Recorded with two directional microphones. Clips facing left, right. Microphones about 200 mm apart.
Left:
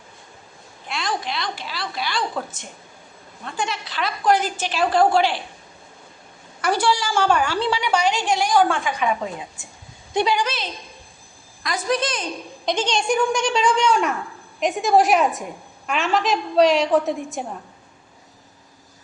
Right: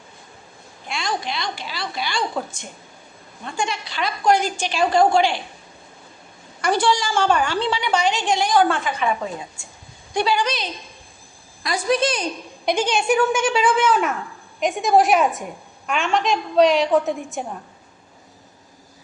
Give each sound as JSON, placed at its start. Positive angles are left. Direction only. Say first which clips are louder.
{"t": 0.9, "sound": "a woman's voice", "louder": "even", "side_deg": 0}
{"t": 3.4, "sound": "a woman's voice", "louder": "right 1 dB", "side_deg": 0}
{"t": 6.6, "sound": "a woman's voice", "louder": "right 1 dB", "side_deg": 10}
{"t": 10.2, "sound": "a woman's voice", "louder": "even", "side_deg": 15}
{"t": 10.4, "sound": "a woman's voice", "louder": "right 2 dB", "side_deg": 5}
{"t": 11.9, "sound": "a woman's voice", "louder": "right 3 dB", "side_deg": -25}
{"t": 12.6, "sound": "a woman's voice", "louder": "right 2 dB", "side_deg": -10}